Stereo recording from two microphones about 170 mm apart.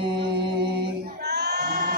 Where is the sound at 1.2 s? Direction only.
75° right (ahead or behind).